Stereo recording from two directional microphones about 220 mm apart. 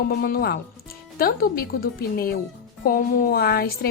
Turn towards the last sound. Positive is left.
turn(degrees=45)  # may be behind; listen again after turning